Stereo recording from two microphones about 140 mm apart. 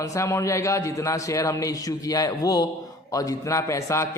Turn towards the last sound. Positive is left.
turn(degrees=20)  # may be behind; listen again after turning